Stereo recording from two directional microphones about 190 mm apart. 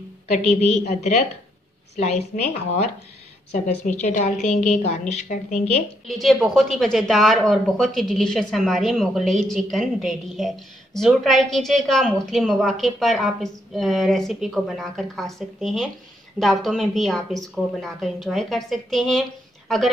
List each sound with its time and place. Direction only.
0.5 s a woman's voice: 35° left (ahead or behind)
3.5 s a woman's voice: 40° left (ahead or behind)
6.0 s a woman's voice: centre (ahead or behind)